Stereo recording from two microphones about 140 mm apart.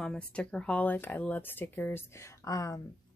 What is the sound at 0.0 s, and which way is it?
Speech, 5° left (ahead or behind).